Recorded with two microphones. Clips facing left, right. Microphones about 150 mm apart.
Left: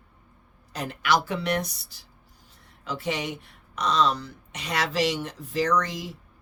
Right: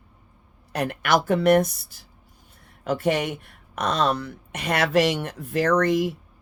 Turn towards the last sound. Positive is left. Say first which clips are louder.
# right 6 dB
turn(degrees=-60)  # may be behind; listen again after turning